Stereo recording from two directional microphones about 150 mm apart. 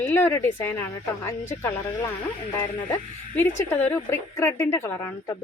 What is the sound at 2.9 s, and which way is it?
A woman's voice, 15° left (ahead or behind).